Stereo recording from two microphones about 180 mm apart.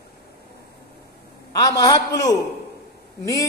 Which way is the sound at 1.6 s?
20° left (ahead or behind).